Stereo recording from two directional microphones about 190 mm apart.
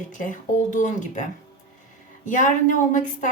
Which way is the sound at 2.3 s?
40° left (ahead or behind).